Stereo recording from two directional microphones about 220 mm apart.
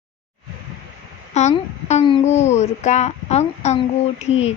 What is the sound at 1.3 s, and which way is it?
A woman's voice, 30° left (ahead or behind).